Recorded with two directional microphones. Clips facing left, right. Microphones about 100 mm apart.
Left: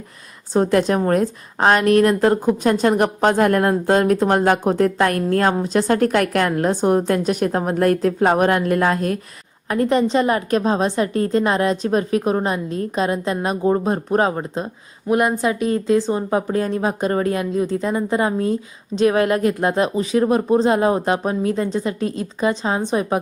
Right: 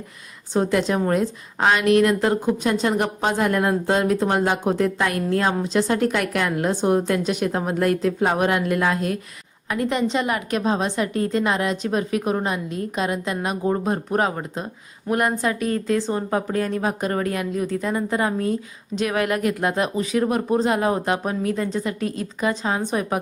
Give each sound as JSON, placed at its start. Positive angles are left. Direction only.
{"t": 0.5, "sound": "a woman's voice", "side_deg": 40}
{"t": 15.1, "sound": "speech", "side_deg": 20}